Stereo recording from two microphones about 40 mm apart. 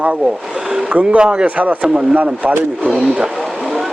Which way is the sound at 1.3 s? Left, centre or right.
Right.